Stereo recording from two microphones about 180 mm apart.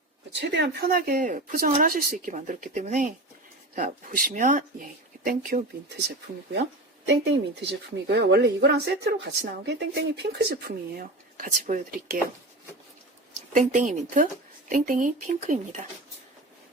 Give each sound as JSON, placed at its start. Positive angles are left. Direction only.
{"t": 0.3, "sound": "speech", "side_deg": -75}
{"t": 13.5, "sound": "speech", "side_deg": -45}